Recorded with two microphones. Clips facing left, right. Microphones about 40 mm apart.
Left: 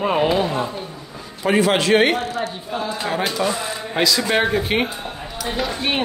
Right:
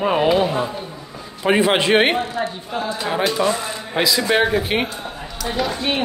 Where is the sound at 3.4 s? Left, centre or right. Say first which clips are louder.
Right 2 dB; centre.